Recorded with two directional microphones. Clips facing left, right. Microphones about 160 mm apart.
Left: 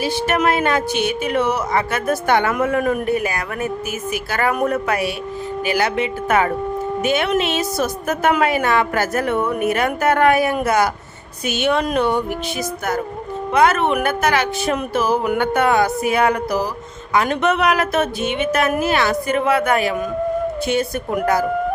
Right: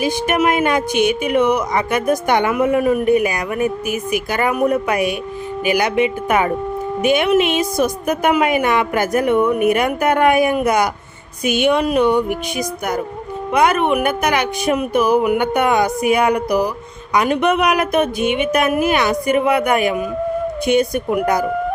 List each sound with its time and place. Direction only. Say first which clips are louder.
0.0 s a woman's voice: right 2 dB; 15° right (ahead or behind)